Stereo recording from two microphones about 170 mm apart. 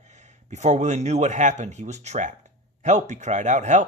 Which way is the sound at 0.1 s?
45° right (ahead or behind).